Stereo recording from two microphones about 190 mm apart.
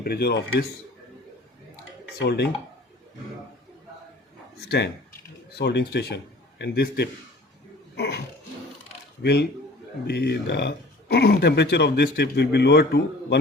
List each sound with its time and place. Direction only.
0.0 s speech: 55° left (ahead or behind)
2.2 s speech: 60° left (ahead or behind)
5.5 s a man's voice: 60° left (ahead or behind)
9.2 s speech: 60° left (ahead or behind)